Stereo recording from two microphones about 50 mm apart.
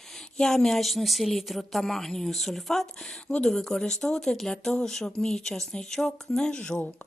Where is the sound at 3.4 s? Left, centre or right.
Centre.